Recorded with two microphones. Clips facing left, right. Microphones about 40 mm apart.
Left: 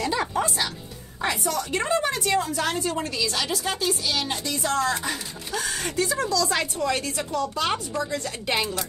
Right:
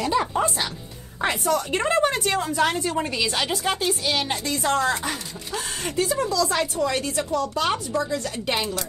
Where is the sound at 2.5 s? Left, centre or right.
Right.